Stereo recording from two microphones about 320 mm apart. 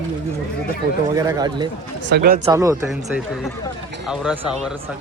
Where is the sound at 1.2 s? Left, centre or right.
Centre.